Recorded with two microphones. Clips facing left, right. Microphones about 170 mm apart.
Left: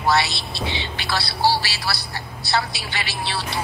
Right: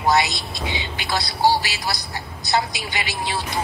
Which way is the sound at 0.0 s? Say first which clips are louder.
Right 1 dB; 20° right (ahead or behind).